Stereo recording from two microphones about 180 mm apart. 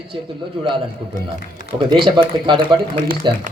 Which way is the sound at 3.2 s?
25° right (ahead or behind).